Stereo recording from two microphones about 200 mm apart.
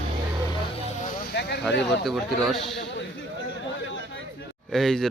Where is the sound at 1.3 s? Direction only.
55° left (ahead or behind).